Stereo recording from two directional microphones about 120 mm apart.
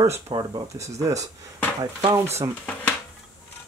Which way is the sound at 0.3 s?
35° right (ahead or behind).